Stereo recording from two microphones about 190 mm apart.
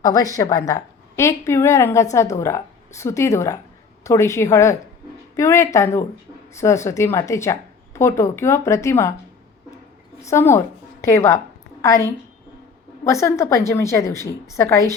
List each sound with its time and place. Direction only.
0.0 s speech: 20° left (ahead or behind)
10.2 s speech: 15° left (ahead or behind)